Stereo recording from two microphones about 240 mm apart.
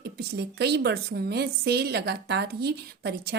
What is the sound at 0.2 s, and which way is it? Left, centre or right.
A woman's voice, right.